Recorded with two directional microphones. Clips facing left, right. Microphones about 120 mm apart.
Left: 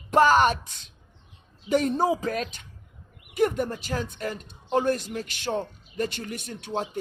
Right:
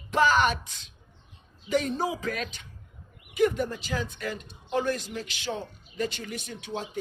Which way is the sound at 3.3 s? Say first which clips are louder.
Left 1 dB; 45° left (ahead or behind).